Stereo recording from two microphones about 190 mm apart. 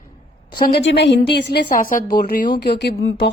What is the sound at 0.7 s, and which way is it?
Speech, 65° left (ahead or behind).